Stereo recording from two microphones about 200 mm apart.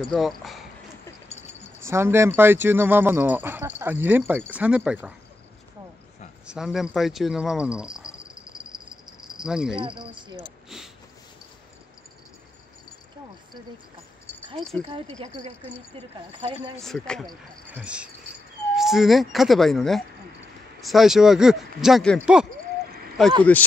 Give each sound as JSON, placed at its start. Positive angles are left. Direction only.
{"t": 0.1, "sound": "speech", "side_deg": 0}
{"t": 1.3, "sound": "a sound", "side_deg": 35}
{"t": 1.9, "sound": "speech", "side_deg": -15}
{"t": 6.4, "sound": "speech", "side_deg": -5}
{"t": 9.2, "sound": "cricket", "side_deg": -5}
{"t": 9.8, "sound": "speech", "side_deg": -25}
{"t": 14.9, "sound": "speech", "side_deg": -25}
{"t": 16.8, "sound": "speech", "side_deg": 5}